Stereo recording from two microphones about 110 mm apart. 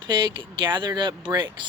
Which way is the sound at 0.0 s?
45° right (ahead or behind).